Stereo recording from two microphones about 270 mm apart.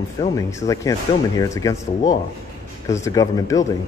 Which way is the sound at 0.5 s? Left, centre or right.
Centre.